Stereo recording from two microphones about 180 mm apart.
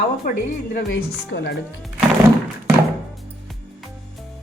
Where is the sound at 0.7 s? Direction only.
70° left (ahead or behind).